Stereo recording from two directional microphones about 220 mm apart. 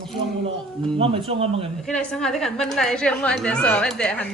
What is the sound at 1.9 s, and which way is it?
A woman's voice, 5° left (ahead or behind).